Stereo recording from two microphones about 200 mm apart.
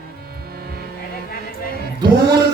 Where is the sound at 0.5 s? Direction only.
50° right (ahead or behind).